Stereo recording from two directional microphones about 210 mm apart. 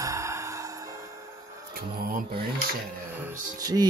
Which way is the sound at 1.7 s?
45° right (ahead or behind).